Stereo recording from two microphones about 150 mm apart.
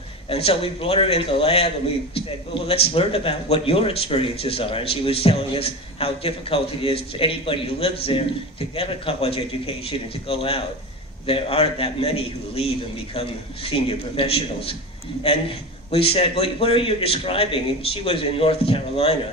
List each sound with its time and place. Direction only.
0.3 s a man's voice: 40° left (ahead or behind)
15.9 s a man's voice: 40° left (ahead or behind)